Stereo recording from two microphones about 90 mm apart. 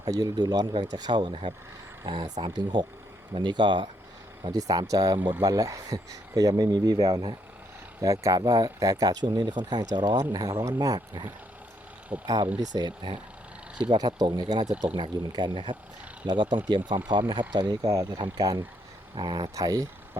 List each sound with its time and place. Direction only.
0.0 s speech: 45° right (ahead or behind); by 3.8 s 60° right (ahead or behind)
4.5 s speech: 40° right (ahead or behind)
8.0 s speech: 40° right (ahead or behind)
9.3 s speech: 55° right (ahead or behind)
10.3 s speech: 45° right (ahead or behind)
12.1 s speech: 15° right (ahead or behind)
12.5 s speech: 50° right (ahead or behind)
18.2 s speech: 55° right (ahead or behind)